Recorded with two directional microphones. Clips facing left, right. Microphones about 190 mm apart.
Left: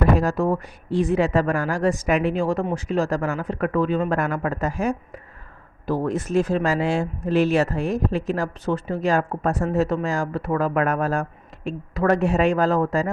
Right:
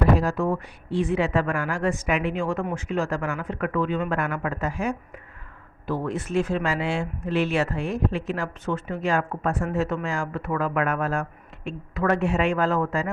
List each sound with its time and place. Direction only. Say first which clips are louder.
0.2 s speech: left 3 dB; 40° left (ahead or behind)